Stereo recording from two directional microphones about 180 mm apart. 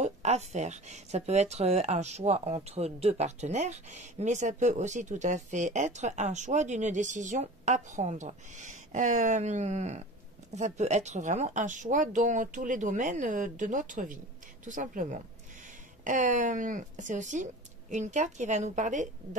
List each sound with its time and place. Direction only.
0.0 s speech: 40° right (ahead or behind)